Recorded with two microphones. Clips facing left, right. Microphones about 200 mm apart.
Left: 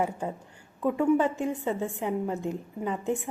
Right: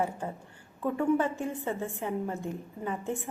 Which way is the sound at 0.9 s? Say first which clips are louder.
Left 3 dB; 15° left (ahead or behind).